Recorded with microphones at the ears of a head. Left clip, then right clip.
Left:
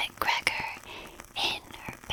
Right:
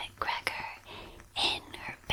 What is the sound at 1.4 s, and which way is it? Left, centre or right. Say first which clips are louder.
Whispering: even; centre.